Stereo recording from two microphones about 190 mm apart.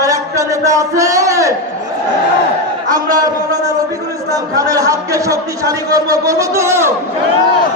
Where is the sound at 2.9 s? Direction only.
20° right (ahead or behind).